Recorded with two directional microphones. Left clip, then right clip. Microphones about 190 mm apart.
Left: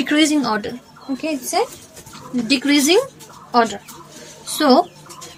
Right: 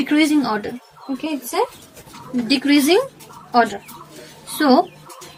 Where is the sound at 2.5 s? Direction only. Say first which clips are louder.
Even; 20° left (ahead or behind).